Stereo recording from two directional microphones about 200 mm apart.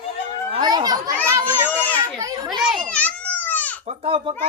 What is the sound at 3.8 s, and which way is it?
Speech, 25° right (ahead or behind).